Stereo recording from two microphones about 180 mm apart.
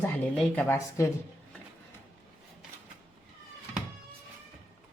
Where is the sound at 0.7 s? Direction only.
15° left (ahead or behind).